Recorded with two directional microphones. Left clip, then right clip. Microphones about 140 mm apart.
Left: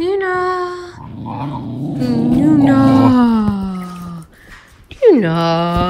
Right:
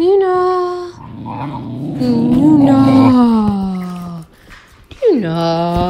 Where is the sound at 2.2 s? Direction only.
25° right (ahead or behind).